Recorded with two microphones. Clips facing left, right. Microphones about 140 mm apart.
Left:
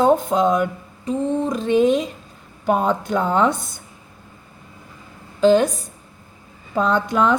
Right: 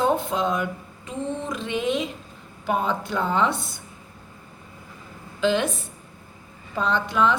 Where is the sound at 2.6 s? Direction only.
45° left (ahead or behind).